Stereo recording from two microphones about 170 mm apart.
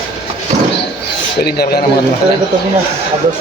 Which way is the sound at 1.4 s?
65° left (ahead or behind).